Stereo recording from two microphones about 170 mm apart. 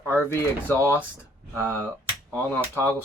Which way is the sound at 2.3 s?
10° left (ahead or behind).